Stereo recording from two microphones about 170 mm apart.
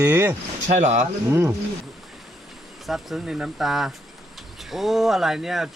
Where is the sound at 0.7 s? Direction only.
45° right (ahead or behind).